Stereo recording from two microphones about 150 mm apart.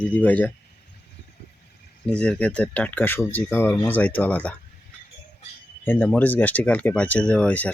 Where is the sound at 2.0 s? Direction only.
5° left (ahead or behind).